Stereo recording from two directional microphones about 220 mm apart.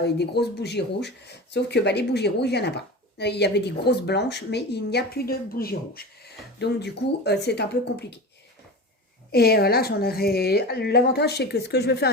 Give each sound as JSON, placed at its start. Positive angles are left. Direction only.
{"t": 0.0, "sound": "speech", "side_deg": 50}
{"t": 9.3, "sound": "speech", "side_deg": 45}